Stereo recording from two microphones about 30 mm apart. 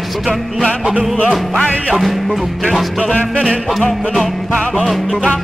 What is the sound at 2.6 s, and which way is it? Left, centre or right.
Music, centre.